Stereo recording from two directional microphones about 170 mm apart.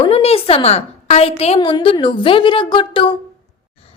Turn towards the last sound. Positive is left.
turn(degrees=30)  # may be behind; listen again after turning